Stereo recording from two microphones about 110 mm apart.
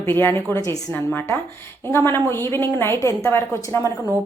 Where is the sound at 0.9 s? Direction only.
20° left (ahead or behind).